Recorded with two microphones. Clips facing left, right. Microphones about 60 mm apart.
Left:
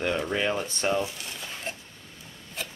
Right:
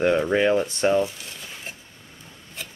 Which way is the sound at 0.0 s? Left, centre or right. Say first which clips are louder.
Right 7 dB; centre.